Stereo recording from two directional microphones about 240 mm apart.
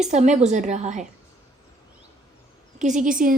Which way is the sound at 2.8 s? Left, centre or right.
Right.